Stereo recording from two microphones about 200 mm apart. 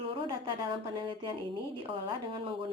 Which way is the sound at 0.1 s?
25° right (ahead or behind).